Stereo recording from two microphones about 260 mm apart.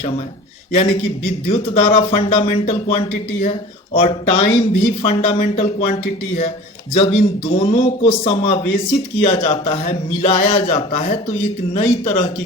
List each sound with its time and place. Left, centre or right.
0.7 s speech: left